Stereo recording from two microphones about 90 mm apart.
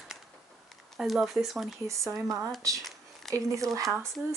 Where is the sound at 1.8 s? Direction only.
35° right (ahead or behind).